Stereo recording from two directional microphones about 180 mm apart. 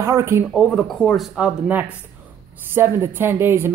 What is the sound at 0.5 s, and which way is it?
Speech, 5° left (ahead or behind).